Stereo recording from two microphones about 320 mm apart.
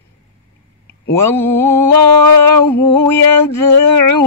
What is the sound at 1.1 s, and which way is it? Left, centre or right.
Mantra, centre.